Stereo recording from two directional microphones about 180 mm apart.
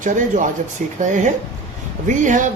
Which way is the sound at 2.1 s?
45° right (ahead or behind).